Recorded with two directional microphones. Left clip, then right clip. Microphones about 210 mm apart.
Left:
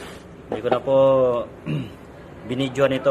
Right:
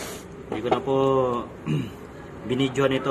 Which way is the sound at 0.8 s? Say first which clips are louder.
Left 7 dB; 45° left (ahead or behind).